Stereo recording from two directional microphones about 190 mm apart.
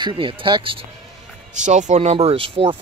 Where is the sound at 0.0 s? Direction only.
25° right (ahead or behind).